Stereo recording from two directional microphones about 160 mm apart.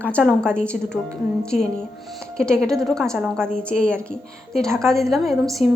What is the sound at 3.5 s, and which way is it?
A woman's voice, 5° left (ahead or behind).